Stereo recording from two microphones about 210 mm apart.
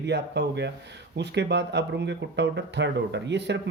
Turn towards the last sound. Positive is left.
turn(degrees=-55)  # may be behind; listen again after turning